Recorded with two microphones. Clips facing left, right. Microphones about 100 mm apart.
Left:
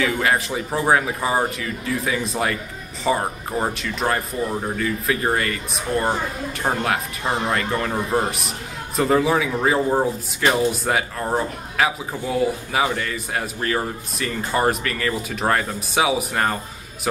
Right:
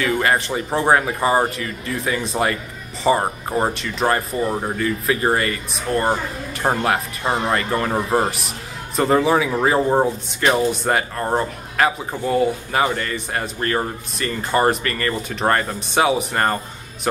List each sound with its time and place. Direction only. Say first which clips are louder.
0.0 s speech: right 1 dB; centre (ahead or behind)
4.5 s speech: right 2 dB; 20° right (ahead or behind)
4.7 s speech: right 2 dB; centre (ahead or behind)
6.6 s speech: right 3 dB; 15° right (ahead or behind)
7.4 s speech: right 2 dB; centre (ahead or behind)
7.9 s speech: right 3 dB; 30° right (ahead or behind)
8.3 s speech: even; centre (ahead or behind)